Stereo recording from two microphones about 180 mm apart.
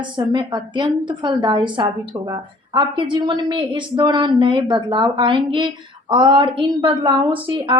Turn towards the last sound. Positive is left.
turn(degrees=-30)  # may be behind; listen again after turning